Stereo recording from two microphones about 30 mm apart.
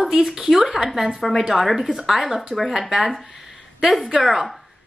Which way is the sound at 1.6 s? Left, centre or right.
Centre.